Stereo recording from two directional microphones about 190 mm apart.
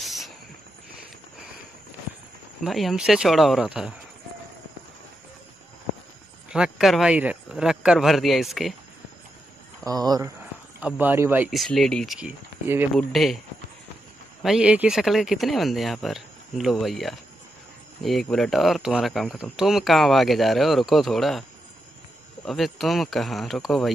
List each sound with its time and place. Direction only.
0.0 s a sound: centre (ahead or behind)
2.6 s speech: centre (ahead or behind)
6.5 s speech: centre (ahead or behind)
9.8 s speech: 20° right (ahead or behind)
10.8 s speech: 10° right (ahead or behind)
11.6 s speech: centre (ahead or behind)
14.4 s speech: 5° right (ahead or behind)